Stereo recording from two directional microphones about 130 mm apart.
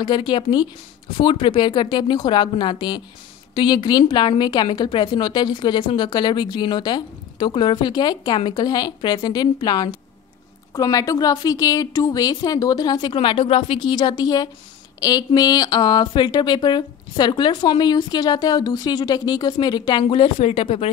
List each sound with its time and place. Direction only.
0.0 s speech: 35° left (ahead or behind)